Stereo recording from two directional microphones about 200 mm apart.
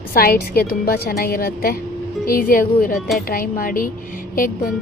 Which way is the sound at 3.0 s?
Centre (ahead or behind).